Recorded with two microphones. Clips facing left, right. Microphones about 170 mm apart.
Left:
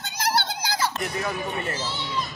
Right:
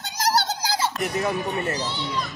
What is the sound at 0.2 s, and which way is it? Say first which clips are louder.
Children playing: right 3 dB; 40° right (ahead or behind).